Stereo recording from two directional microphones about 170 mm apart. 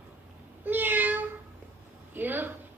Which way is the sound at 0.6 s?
10° right (ahead or behind).